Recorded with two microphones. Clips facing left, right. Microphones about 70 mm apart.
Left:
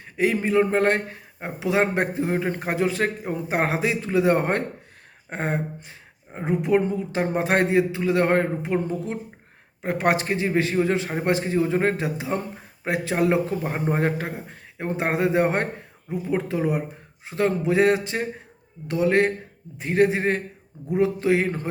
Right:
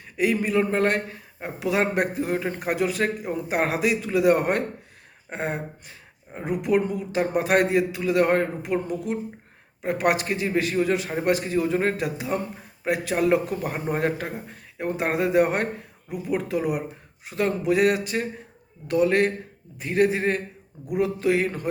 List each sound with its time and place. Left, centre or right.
0.0 s a man's voice: left